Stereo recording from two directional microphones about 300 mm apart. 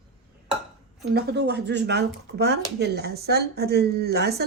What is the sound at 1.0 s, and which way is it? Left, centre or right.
Speech, right.